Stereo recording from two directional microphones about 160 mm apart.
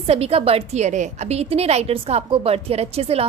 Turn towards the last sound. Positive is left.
turn(degrees=-40)  # may be behind; listen again after turning